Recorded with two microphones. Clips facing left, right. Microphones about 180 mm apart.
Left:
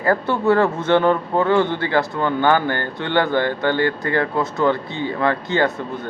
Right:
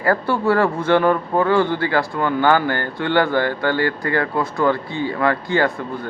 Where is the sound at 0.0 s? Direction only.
20° left (ahead or behind).